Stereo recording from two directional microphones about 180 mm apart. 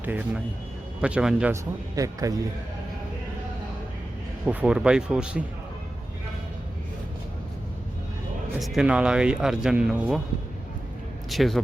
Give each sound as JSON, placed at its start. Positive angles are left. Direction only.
{"t": 0.0, "sound": "a man's voice", "side_deg": -10}
{"t": 2.0, "sound": "speech", "side_deg": -20}
{"t": 4.4, "sound": "speech", "side_deg": -5}
{"t": 8.5, "sound": "speech", "side_deg": 0}
{"t": 11.3, "sound": "a man's voice", "side_deg": 0}